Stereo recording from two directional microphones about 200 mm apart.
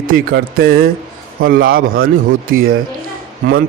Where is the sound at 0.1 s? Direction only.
45° right (ahead or behind).